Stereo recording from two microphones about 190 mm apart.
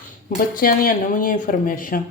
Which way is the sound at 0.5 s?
50° left (ahead or behind).